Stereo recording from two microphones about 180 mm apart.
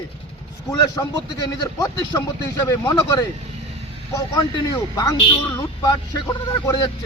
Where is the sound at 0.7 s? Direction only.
20° left (ahead or behind).